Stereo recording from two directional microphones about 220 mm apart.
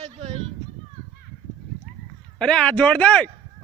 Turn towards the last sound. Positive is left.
turn(degrees=5)  # may be behind; listen again after turning